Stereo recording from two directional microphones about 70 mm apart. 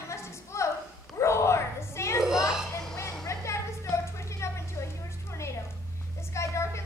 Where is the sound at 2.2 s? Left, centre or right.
Centre.